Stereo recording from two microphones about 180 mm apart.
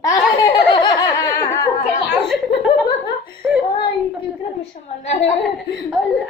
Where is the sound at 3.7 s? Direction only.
30° left (ahead or behind).